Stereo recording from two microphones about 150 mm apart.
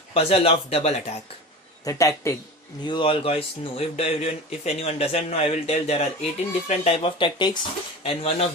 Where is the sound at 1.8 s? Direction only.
20° left (ahead or behind).